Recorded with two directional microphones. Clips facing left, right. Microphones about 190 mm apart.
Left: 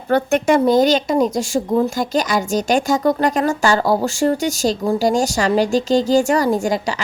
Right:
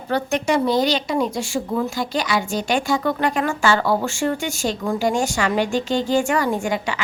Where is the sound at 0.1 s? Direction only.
55° left (ahead or behind).